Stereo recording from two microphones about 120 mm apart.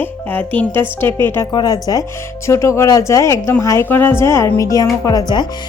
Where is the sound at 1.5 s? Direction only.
35° left (ahead or behind).